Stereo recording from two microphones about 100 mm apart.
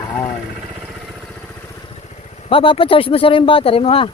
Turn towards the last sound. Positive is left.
turn(degrees=70)  # may be behind; listen again after turning